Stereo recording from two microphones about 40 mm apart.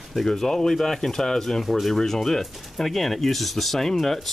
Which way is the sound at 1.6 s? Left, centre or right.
Centre.